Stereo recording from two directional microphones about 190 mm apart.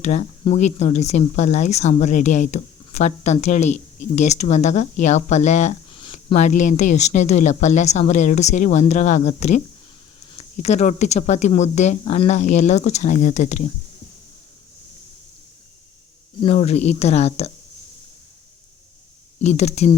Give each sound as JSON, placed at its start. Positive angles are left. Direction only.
{"t": 0.0, "sound": "speech", "side_deg": 35}
{"t": 16.4, "sound": "speech", "side_deg": 35}
{"t": 19.4, "sound": "speech", "side_deg": 35}